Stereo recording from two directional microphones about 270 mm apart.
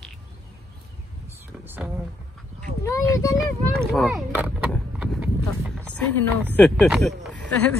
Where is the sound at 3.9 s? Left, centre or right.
Centre.